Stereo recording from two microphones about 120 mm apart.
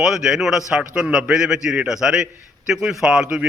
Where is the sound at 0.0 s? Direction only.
5° right (ahead or behind).